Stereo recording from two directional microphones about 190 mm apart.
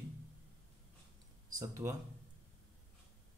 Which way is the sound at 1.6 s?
15° right (ahead or behind).